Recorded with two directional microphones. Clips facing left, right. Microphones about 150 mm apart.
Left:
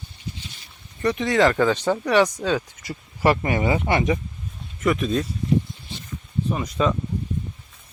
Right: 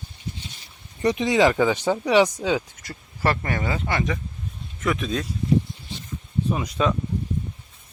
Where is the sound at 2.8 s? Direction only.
10° left (ahead or behind).